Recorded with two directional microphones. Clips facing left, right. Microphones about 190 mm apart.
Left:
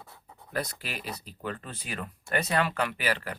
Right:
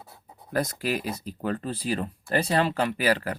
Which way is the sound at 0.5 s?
45° right (ahead or behind).